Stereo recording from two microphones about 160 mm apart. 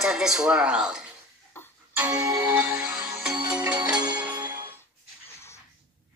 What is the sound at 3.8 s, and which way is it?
Music, 25° right (ahead or behind).